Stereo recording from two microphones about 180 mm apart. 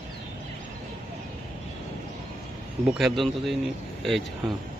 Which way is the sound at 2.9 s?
Centre (ahead or behind).